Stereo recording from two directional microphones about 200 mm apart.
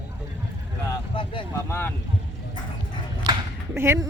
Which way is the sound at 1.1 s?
25° left (ahead or behind).